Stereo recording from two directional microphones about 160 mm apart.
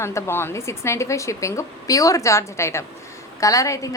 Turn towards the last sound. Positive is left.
turn(degrees=20)  # may be behind; listen again after turning